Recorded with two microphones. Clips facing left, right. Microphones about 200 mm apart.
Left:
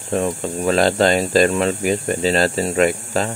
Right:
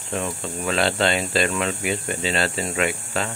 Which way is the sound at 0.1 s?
40° left (ahead or behind).